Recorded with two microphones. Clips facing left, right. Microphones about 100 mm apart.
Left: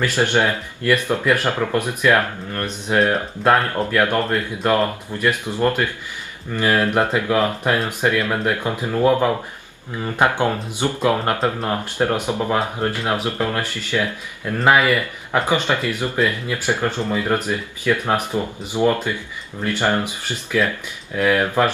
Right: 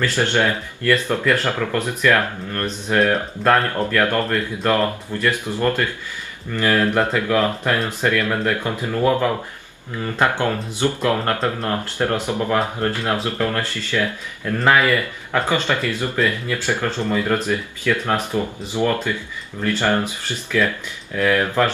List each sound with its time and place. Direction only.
0.0 s speech: 15° left (ahead or behind)